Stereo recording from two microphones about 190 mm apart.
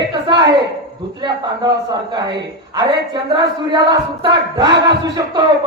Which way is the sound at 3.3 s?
25° right (ahead or behind).